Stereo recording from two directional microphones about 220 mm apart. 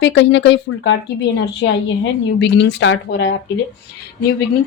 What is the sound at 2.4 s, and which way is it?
Speech, 55° left (ahead or behind).